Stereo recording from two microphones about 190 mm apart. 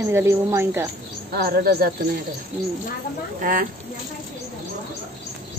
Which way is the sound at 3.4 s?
45° right (ahead or behind).